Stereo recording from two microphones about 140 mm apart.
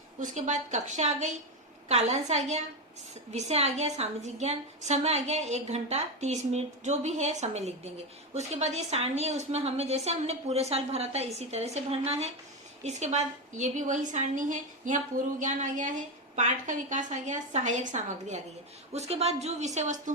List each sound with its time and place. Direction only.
0.2 s a woman's voice: 60° right (ahead or behind)